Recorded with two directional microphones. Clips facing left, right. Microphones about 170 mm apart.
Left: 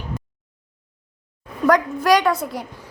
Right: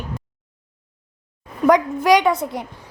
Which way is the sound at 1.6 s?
20° right (ahead or behind).